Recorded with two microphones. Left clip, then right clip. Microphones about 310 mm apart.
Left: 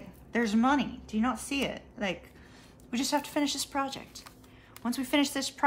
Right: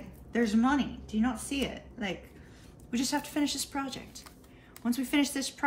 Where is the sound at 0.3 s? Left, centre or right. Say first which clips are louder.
Left 1 dB; centre.